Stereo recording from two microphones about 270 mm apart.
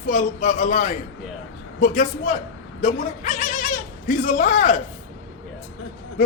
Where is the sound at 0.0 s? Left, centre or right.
Left.